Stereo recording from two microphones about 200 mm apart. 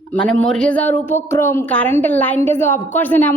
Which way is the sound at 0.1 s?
5° left (ahead or behind).